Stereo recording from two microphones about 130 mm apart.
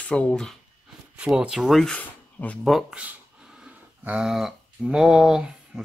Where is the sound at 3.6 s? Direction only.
5° right (ahead or behind).